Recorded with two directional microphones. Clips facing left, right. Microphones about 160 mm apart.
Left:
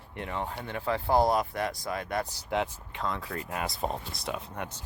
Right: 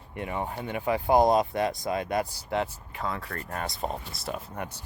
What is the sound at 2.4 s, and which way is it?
Speech, centre (ahead or behind).